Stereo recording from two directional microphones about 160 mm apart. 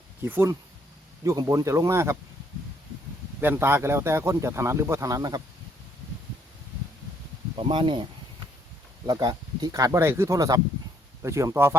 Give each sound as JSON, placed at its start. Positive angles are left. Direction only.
{"t": 0.3, "sound": "speech", "side_deg": -15}
{"t": 3.4, "sound": "speech", "side_deg": -15}
{"t": 7.5, "sound": "speech", "side_deg": -30}
{"t": 9.0, "sound": "speech", "side_deg": -25}